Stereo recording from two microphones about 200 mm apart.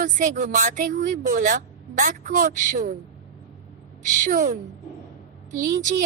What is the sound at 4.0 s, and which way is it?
Speech, 40° right (ahead or behind).